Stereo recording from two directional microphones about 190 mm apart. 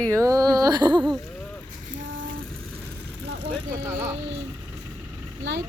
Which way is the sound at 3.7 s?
10° right (ahead or behind).